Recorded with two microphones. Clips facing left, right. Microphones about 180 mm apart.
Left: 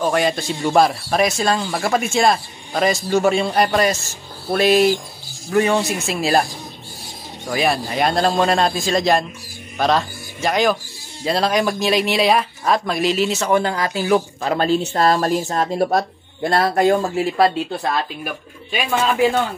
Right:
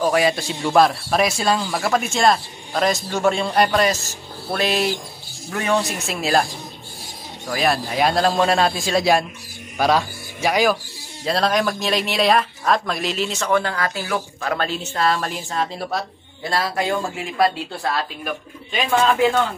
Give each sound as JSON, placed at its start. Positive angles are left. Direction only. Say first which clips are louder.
{"t": 0.0, "sound": "a man's voice", "louder": "even", "side_deg": -5}
{"t": 7.4, "sound": "a man's voice", "louder": "left 1 dB", "side_deg": 0}
{"t": 13.4, "sound": "a woman's voice", "louder": "left 2 dB", "side_deg": 20}
{"t": 17.9, "sound": "speech", "louder": "left 1 dB", "side_deg": 10}